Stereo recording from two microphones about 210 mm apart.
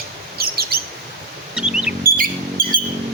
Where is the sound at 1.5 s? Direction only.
5° right (ahead or behind).